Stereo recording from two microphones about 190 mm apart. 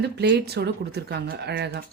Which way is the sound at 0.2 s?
60° right (ahead or behind).